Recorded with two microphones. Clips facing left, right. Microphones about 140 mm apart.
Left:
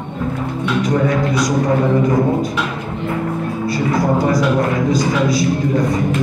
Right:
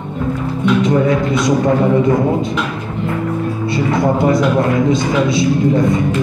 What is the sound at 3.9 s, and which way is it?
A man's voice, 25° right (ahead or behind).